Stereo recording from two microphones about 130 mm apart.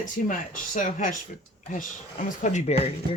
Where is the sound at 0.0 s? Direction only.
85° left.